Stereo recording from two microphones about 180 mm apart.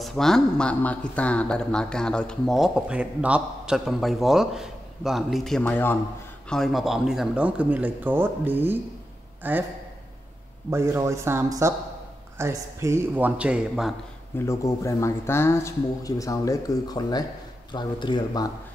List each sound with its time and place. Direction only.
0.0 s a man's voice: centre (ahead or behind)
10.7 s speech: 15° right (ahead or behind)
14.4 s speech: 15° left (ahead or behind)